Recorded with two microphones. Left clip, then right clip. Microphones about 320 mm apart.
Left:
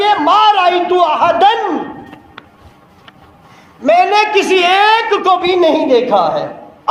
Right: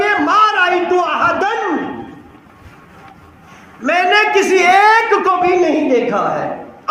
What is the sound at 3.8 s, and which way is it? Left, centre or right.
A man's voice, centre.